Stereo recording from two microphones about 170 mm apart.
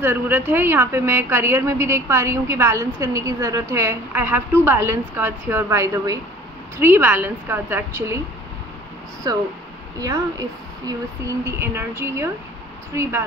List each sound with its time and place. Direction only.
0.0 s a woman's voice: 10° right (ahead or behind)
9.3 s speech: 20° right (ahead or behind)
10.9 s a woman's voice: 15° right (ahead or behind)